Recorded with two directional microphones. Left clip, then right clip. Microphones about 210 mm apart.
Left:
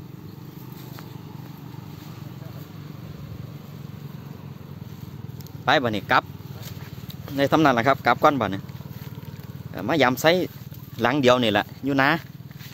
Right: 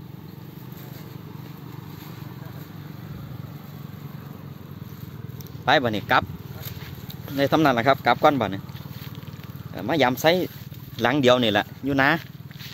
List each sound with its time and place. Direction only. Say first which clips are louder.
5.7 s speech: even; centre (ahead or behind)
7.2 s speech: left 1 dB; 5° left (ahead or behind)
9.8 s speech: left 1 dB; 5° left (ahead or behind)